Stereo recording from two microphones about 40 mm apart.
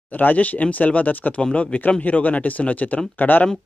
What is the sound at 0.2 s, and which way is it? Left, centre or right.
Speech, left.